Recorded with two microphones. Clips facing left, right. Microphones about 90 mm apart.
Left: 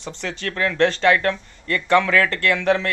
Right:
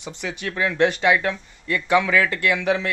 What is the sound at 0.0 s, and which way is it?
Speech, 10° right (ahead or behind).